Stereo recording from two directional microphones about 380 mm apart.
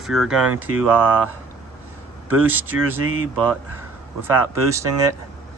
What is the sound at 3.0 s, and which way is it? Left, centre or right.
Speech, right.